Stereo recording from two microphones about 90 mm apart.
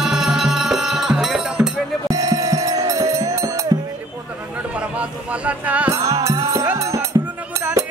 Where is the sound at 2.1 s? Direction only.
45° right (ahead or behind).